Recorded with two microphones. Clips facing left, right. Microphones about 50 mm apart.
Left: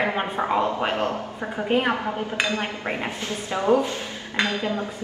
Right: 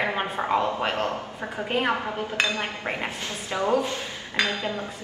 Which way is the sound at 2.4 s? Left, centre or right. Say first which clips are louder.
Left 1 dB; left.